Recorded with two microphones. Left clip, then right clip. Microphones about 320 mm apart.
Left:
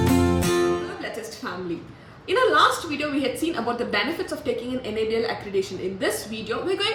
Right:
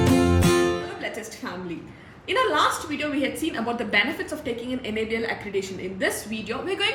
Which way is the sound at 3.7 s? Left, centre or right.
Centre.